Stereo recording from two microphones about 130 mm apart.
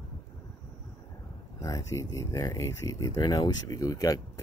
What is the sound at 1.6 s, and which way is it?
Speech, 25° left (ahead or behind).